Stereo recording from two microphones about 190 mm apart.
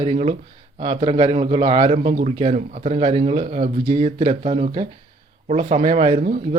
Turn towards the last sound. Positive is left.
turn(degrees=-35)  # may be behind; listen again after turning